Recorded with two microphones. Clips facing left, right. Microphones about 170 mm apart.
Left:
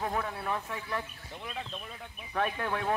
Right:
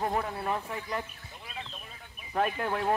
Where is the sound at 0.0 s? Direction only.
15° right (ahead or behind).